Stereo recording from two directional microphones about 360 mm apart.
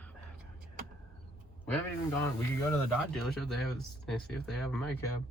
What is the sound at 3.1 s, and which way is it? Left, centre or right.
Speech, centre.